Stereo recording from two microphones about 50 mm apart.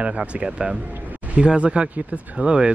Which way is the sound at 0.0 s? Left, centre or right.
Right.